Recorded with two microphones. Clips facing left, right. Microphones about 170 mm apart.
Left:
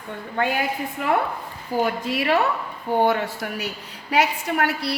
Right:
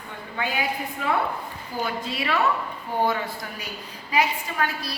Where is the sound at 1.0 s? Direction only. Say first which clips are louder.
Left 3 dB; 60° left (ahead or behind).